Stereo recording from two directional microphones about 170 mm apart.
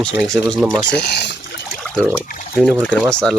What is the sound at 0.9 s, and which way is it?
Pour, 90° left.